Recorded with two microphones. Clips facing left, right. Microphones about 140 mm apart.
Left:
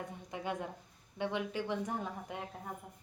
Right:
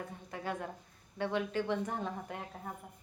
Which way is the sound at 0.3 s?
15° left (ahead or behind).